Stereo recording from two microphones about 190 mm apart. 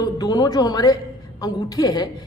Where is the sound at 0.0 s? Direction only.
20° left (ahead or behind).